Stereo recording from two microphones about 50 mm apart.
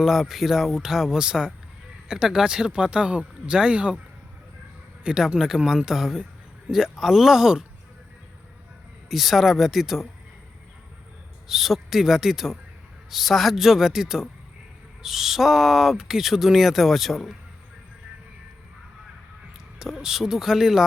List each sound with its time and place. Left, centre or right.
0.0 s speech: centre
5.0 s speech: centre
9.0 s speech: centre
11.4 s speech: centre
19.8 s speech: centre